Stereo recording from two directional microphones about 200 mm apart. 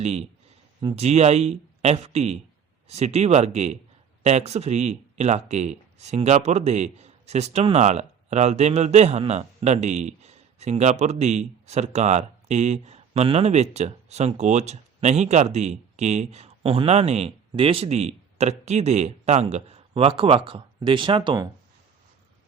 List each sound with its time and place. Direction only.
0.0 s speech: 30° right (ahead or behind)